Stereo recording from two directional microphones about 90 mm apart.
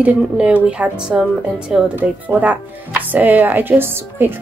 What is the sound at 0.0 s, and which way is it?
A woman's voice, 15° right (ahead or behind).